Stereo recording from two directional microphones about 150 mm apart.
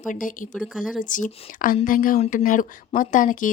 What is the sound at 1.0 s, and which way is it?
Speech, 60° left (ahead or behind).